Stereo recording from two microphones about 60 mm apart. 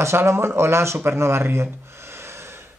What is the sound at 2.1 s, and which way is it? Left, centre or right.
Snort, right.